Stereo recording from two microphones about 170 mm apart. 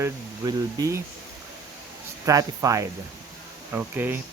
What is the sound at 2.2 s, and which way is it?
Speech, 20° right (ahead or behind).